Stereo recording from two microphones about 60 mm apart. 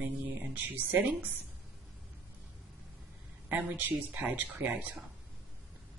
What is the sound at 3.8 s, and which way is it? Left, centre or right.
Speech, right.